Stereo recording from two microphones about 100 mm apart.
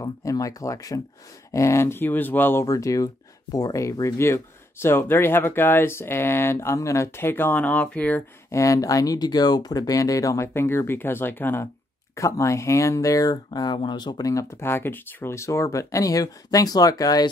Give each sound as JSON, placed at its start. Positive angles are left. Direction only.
{"t": 0.0, "sound": "speech", "side_deg": 35}
{"t": 2.6, "sound": "speech", "side_deg": 35}
{"t": 8.5, "sound": "speech", "side_deg": 30}
{"t": 12.2, "sound": "speech", "side_deg": 30}